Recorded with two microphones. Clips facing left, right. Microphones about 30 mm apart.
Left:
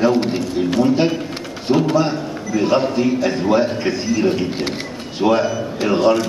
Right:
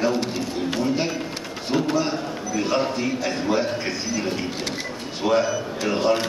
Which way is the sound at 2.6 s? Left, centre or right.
Centre.